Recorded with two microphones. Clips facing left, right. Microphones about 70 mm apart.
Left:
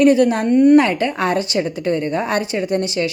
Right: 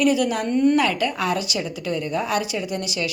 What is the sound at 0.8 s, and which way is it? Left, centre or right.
Speech, left.